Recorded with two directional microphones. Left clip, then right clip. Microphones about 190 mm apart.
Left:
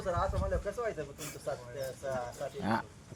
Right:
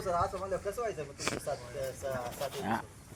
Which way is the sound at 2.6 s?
60° left (ahead or behind).